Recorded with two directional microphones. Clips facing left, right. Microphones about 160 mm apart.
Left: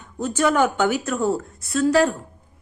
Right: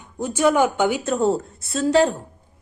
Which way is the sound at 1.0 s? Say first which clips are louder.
Right 2 dB; 25° right (ahead or behind).